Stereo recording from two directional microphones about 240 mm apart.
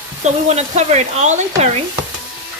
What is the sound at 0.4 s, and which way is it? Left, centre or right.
Speech, right.